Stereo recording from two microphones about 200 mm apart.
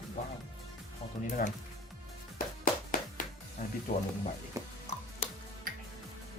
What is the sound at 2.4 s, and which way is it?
Music, 45° left (ahead or behind).